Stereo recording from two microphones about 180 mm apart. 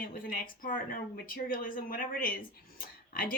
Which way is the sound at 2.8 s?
50° left (ahead or behind).